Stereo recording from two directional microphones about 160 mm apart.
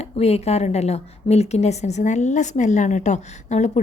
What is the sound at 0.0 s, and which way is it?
A woman's voice, 40° left (ahead or behind).